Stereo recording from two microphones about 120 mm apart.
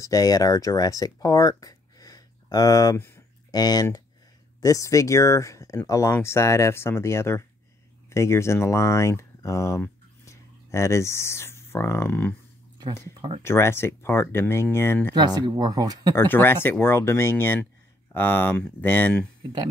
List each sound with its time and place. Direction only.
0.0 s speech: 30° left (ahead or behind)
13.4 s speech: 20° left (ahead or behind)
15.1 s speech: 35° right (ahead or behind)
16.2 s speech: 20° left (ahead or behind)